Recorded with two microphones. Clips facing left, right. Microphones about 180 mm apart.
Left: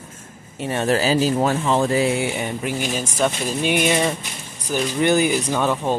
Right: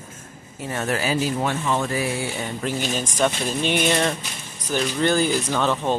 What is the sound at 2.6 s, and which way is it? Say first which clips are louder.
Speech: left 1 dB; 10° left (ahead or behind).